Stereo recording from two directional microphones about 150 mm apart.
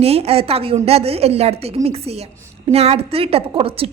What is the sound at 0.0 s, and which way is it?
A woman's voice, 40° right (ahead or behind).